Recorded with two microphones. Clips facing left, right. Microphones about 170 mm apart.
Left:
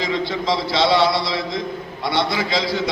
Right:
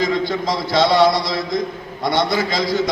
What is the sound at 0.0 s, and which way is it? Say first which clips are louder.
A man's voice: right 3 dB; 45° right (ahead or behind).